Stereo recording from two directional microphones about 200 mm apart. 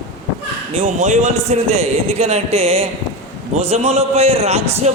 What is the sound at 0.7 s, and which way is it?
A man's voice, 35° right (ahead or behind).